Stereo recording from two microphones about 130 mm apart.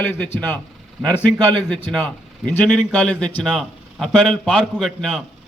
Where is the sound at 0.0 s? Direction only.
15° left (ahead or behind).